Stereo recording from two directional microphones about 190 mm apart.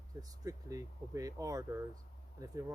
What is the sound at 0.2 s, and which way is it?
Speech, 20° right (ahead or behind).